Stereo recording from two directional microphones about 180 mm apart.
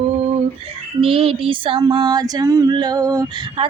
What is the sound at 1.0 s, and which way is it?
Female singing, 30° right (ahead or behind).